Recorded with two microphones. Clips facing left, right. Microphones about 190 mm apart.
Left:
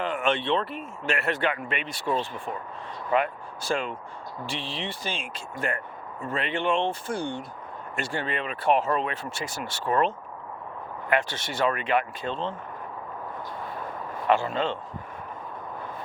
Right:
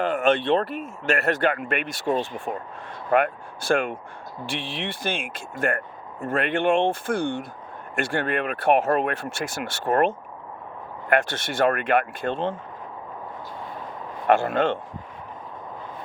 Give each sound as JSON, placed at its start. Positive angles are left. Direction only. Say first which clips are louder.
{"t": 0.0, "sound": "speech", "louder": "right 5 dB", "side_deg": -45}
{"t": 3.1, "sound": "speech", "louder": "right 4 dB", "side_deg": -55}
{"t": 14.3, "sound": "speech", "louder": "right 4 dB", "side_deg": -55}